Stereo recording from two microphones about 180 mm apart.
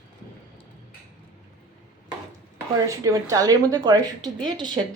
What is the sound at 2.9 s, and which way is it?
Speech, 20° right (ahead or behind).